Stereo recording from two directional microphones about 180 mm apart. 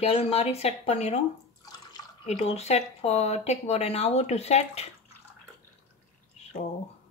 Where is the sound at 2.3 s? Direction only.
35° left (ahead or behind).